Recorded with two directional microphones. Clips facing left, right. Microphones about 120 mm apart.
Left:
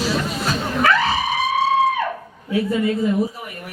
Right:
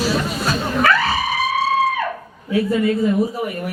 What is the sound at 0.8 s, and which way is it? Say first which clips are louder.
Music: even; 20° left (ahead or behind).